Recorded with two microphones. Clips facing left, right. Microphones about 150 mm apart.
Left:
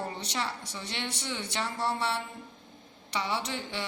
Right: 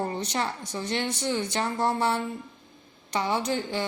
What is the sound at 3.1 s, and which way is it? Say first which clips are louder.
Speech: right 6 dB; 45° right (ahead or behind).